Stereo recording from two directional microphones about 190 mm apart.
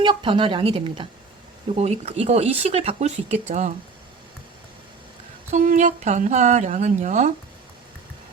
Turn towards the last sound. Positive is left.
turn(degrees=-40)  # may be behind; listen again after turning